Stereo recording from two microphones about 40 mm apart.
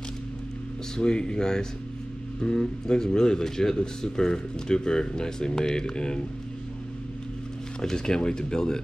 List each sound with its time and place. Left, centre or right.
0.9 s speech: left
7.8 s speech: centre